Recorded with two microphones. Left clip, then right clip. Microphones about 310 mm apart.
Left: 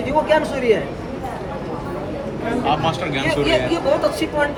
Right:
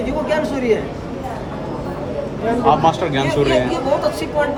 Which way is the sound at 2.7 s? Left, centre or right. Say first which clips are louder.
Right 6 dB; right.